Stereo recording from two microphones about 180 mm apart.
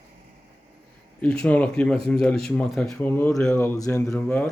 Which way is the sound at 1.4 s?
5° left (ahead or behind).